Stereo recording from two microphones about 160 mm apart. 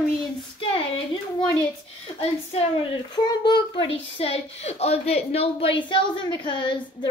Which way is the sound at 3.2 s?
30° left (ahead or behind).